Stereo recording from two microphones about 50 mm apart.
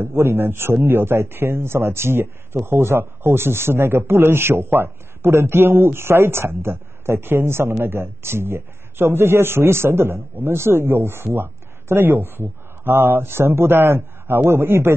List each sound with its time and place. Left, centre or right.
0.0 s a man's voice: right